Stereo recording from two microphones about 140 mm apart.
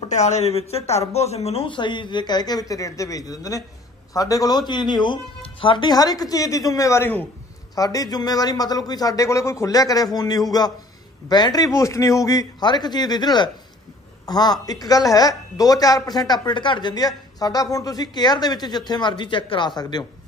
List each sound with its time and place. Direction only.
0.1 s a woman's voice: 55° left (ahead or behind); by 20.1 s 30° left (ahead or behind)